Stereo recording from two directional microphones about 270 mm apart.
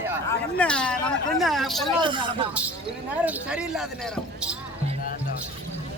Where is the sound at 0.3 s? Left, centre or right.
Centre.